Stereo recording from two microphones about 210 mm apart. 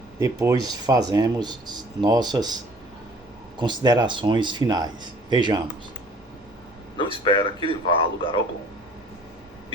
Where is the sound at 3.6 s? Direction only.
20° right (ahead or behind).